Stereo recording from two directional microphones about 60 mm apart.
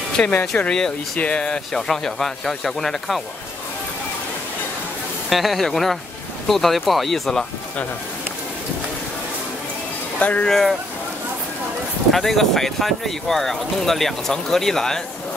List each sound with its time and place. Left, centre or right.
0.2 s speech: centre
5.3 s speech: centre
10.1 s speech: left
10.4 s speech: centre
12.1 s speech: centre